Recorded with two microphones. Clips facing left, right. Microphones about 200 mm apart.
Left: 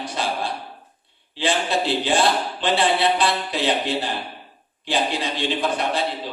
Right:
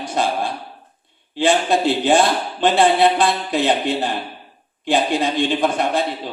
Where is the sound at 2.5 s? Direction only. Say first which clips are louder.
Right 10 dB; 50° right (ahead or behind).